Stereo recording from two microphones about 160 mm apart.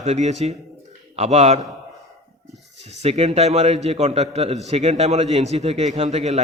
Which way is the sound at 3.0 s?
40° right (ahead or behind).